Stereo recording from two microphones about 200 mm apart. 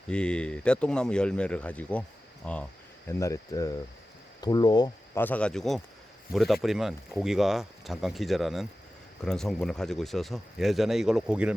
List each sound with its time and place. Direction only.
0.1 s speech: 5° left (ahead or behind); by 5.2 s 20° left (ahead or behind)
5.2 s speech: 5° left (ahead or behind)